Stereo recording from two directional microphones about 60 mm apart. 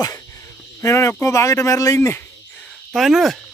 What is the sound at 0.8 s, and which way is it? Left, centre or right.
Speech, left.